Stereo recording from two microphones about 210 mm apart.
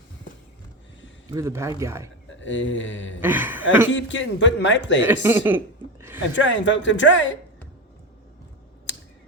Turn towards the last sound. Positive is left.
turn(degrees=60)  # may be behind; listen again after turning